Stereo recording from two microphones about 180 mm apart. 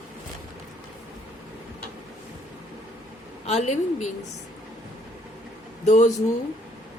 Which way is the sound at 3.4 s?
40° left (ahead or behind).